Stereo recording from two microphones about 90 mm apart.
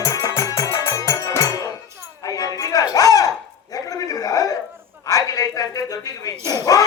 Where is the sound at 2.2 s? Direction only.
40° left (ahead or behind).